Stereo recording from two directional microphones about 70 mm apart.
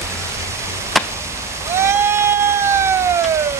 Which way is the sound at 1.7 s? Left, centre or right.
Right.